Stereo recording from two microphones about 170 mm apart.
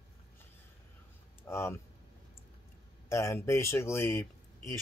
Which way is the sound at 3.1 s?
15° left (ahead or behind).